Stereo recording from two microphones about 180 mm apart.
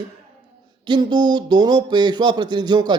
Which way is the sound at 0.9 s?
25° right (ahead or behind).